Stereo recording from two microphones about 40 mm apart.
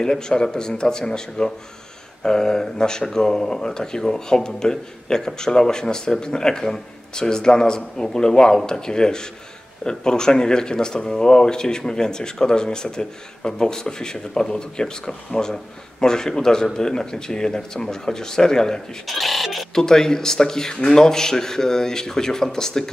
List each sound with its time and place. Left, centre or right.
0.0 s speech: centre
19.0 s speech: centre
19.7 s speech: centre